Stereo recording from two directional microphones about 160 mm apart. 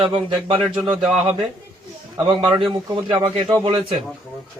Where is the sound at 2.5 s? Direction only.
30° right (ahead or behind).